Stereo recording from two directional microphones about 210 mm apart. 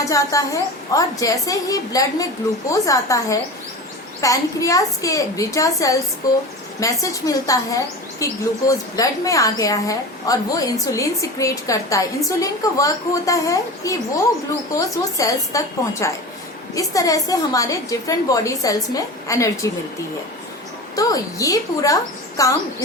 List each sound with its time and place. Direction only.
0.0 s a woman's voice: 15° left (ahead or behind)
20.9 s a woman's voice: 15° left (ahead or behind)